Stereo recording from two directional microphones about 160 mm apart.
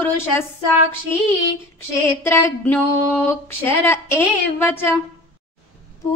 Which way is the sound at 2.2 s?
15° left (ahead or behind).